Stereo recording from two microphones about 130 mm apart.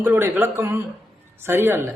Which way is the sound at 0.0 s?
15° right (ahead or behind).